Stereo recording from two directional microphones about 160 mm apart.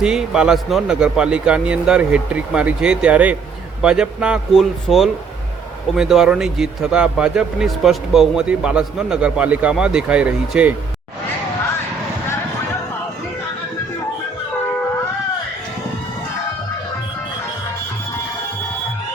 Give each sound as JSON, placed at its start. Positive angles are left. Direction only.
{"t": 0.0, "sound": "speech", "side_deg": -5}